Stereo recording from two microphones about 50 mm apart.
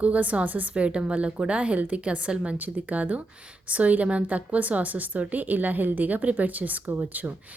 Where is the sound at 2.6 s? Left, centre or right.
Right.